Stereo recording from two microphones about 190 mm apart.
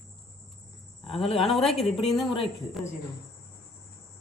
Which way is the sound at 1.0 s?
30° left (ahead or behind).